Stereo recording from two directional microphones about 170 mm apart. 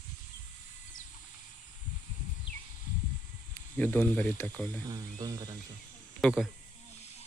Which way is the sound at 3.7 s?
10° left (ahead or behind).